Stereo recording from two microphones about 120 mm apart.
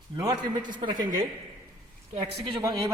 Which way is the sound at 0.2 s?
35° right (ahead or behind).